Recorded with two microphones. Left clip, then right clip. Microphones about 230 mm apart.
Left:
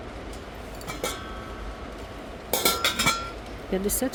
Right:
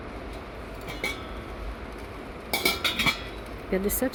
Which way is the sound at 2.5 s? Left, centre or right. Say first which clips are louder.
Left 1 dB; left.